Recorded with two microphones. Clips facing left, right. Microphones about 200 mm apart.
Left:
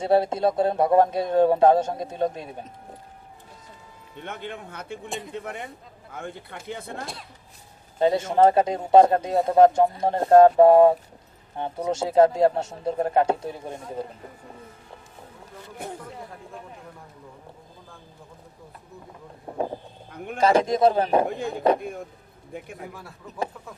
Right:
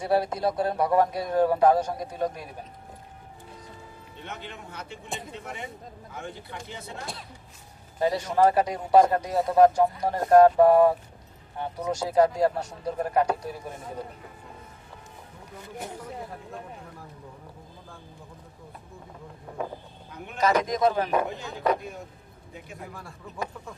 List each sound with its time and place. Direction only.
0.0 s speech: 25° left (ahead or behind)
4.2 s speech: 55° left (ahead or behind)
5.0 s speech: centre (ahead or behind)
5.3 s speech: 55° left (ahead or behind)
7.9 s speech: 25° left (ahead or behind)
19.5 s a sound: 30° left (ahead or behind)
20.1 s a sound: 50° left (ahead or behind)
20.4 s speech: 30° left (ahead or behind)
21.2 s speech: 55° left (ahead or behind)
23.0 s speech: 5° left (ahead or behind)